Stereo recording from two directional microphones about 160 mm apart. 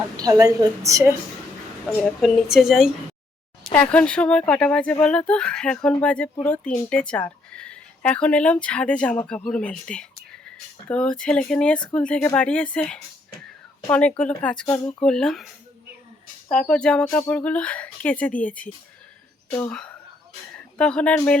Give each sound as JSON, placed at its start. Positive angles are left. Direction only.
{"t": 0.2, "sound": "a woman's voice", "side_deg": -20}
{"t": 2.2, "sound": "speech", "side_deg": 0}
{"t": 16.6, "sound": "speech", "side_deg": 5}
{"t": 19.7, "sound": "speech", "side_deg": 5}